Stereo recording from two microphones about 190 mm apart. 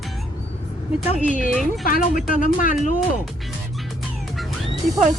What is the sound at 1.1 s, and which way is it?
Speech, 40° left (ahead or behind).